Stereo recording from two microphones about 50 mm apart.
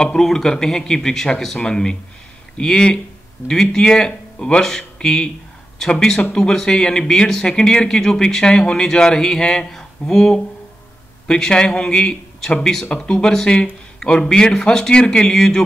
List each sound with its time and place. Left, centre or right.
0.0 s speech: centre